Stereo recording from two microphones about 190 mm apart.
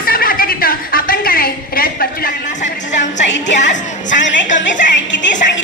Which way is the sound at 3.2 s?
70° left (ahead or behind).